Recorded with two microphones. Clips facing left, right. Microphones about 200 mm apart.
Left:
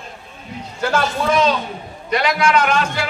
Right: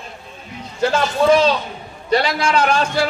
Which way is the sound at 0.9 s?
30° right (ahead or behind).